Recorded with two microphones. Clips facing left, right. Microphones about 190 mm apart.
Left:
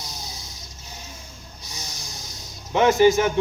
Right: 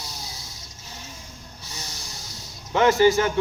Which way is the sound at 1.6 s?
15° left (ahead or behind).